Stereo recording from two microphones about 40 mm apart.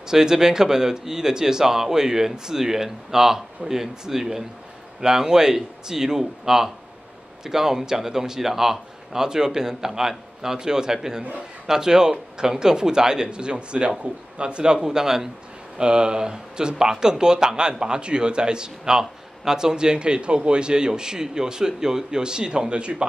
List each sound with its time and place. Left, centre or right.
0.1 s speech: centre